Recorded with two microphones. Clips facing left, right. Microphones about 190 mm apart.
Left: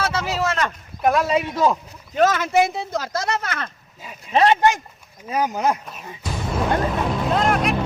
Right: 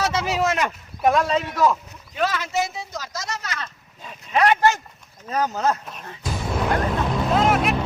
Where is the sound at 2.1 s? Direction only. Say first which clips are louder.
Left 6 dB; 45° left (ahead or behind).